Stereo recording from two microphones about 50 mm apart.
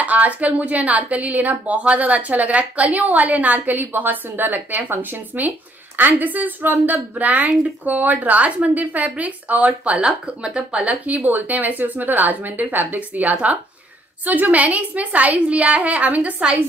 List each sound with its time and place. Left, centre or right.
0.0 s a woman's voice: right